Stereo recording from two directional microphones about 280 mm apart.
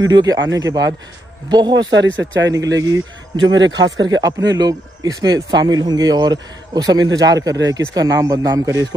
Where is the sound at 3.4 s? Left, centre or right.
Right.